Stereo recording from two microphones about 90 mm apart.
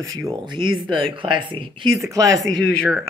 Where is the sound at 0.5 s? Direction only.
65° right (ahead or behind).